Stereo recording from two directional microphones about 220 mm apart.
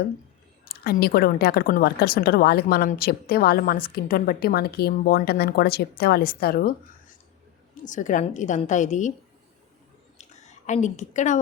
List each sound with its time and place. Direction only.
0.6 s a woman's voice: 45° left (ahead or behind)
7.9 s a woman's voice: 35° left (ahead or behind)
10.2 s a sound: 30° left (ahead or behind)